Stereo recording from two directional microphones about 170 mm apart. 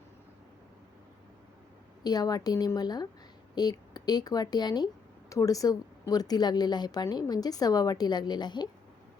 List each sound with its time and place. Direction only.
2.0 s a woman's voice: 20° left (ahead or behind)